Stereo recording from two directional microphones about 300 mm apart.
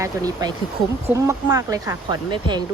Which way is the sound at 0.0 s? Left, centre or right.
Centre.